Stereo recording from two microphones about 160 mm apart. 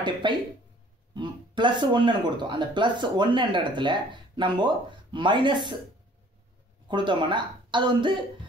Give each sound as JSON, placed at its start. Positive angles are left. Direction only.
{"t": 0.2, "sound": "speech", "side_deg": -30}
{"t": 6.9, "sound": "speech", "side_deg": -30}